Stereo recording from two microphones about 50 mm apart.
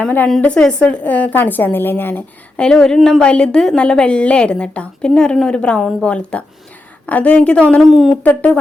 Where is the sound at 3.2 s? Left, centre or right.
Centre.